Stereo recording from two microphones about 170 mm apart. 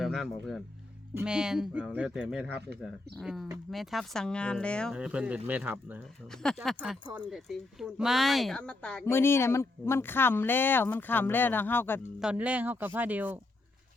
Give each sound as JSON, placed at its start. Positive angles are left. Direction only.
{"t": 0.0, "sound": "speech", "side_deg": 0}
{"t": 4.9, "sound": "speech", "side_deg": -5}
{"t": 6.4, "sound": "speech", "side_deg": 0}
{"t": 12.2, "sound": "speech", "side_deg": -5}